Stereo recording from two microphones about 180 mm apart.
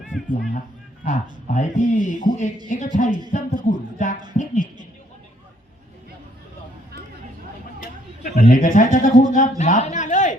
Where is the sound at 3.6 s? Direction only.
45° left (ahead or behind).